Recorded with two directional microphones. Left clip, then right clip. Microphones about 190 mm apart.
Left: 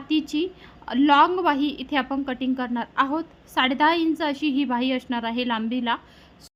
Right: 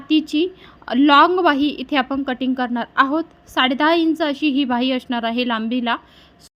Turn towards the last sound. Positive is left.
turn(degrees=-20)  # may be behind; listen again after turning